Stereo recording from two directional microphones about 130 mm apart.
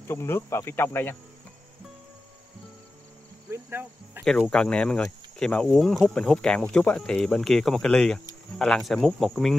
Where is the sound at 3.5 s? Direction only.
15° right (ahead or behind).